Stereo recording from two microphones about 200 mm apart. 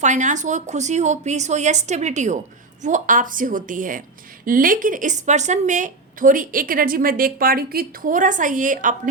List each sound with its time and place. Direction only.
0.0 s a woman's voice: 35° right (ahead or behind)